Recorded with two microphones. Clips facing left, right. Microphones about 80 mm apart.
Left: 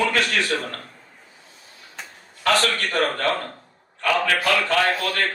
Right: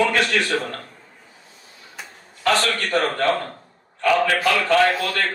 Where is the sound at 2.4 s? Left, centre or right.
Right.